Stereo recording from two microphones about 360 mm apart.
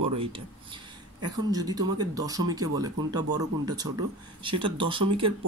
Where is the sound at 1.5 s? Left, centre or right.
Centre.